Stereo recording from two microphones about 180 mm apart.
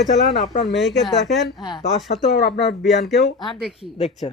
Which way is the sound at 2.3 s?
65° left (ahead or behind).